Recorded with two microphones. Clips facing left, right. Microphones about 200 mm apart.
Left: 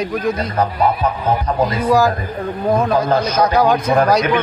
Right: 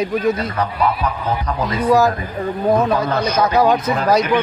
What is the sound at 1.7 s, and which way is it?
A man's voice, centre (ahead or behind).